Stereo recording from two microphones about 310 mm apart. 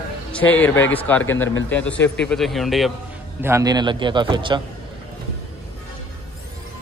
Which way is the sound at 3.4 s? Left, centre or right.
Centre.